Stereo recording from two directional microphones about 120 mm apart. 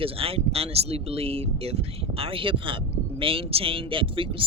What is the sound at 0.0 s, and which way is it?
Speech, 50° right (ahead or behind).